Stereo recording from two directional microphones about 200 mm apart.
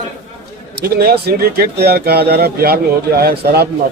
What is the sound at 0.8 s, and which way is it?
Speech, 50° right (ahead or behind).